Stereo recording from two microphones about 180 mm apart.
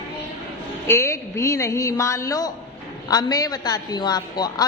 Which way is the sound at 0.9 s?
15° left (ahead or behind).